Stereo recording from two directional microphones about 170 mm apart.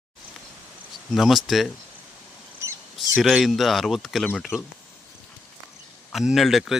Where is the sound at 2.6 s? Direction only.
15° right (ahead or behind).